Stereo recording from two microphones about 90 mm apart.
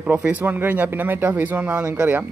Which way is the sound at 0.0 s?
15° right (ahead or behind).